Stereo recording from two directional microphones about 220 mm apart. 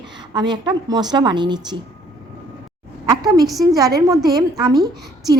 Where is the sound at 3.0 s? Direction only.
15° right (ahead or behind).